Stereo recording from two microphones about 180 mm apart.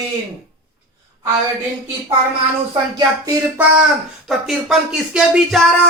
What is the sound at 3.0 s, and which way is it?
Speech, 15° right (ahead or behind).